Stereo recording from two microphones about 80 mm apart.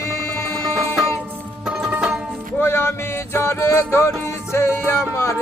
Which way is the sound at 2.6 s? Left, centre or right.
Left.